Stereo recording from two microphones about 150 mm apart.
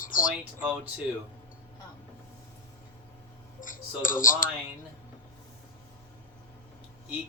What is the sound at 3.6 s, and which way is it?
Speech, 60° left (ahead or behind).